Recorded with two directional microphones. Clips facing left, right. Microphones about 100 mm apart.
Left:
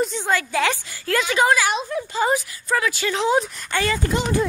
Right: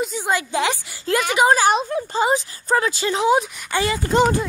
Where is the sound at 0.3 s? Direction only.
20° right (ahead or behind).